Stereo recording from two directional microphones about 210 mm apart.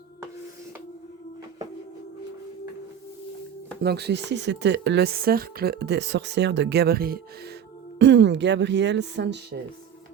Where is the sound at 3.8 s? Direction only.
50° right (ahead or behind).